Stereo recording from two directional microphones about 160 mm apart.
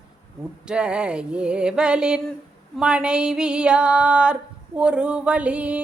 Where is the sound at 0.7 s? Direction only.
5° right (ahead or behind).